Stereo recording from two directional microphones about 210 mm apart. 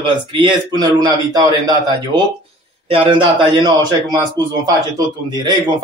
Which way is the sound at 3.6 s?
20° right (ahead or behind).